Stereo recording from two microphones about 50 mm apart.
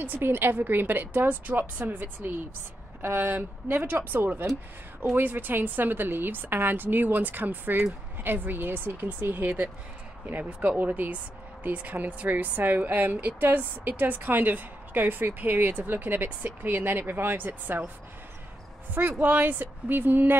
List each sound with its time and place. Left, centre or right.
0.0 s a woman's voice: right
18.9 s a woman's voice: right